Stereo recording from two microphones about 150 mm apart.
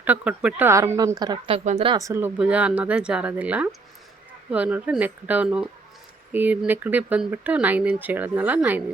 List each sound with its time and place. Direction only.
0.0 s speech: 10° right (ahead or behind); by 1.5 s 25° right (ahead or behind)
1.5 s speech: 45° right (ahead or behind)
2.0 s speech: 20° right (ahead or behind)